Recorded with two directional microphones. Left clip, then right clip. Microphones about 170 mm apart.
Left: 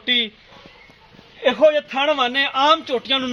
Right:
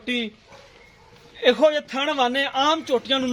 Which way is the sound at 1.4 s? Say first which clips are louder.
Left 2 dB; 30° left (ahead or behind).